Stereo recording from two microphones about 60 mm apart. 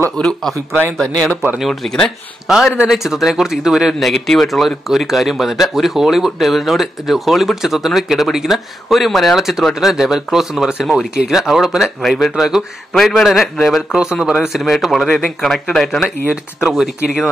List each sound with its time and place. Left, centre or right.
0.2 s speech: centre
0.9 s speech: centre
2.4 s speech: centre
16.6 s speech: centre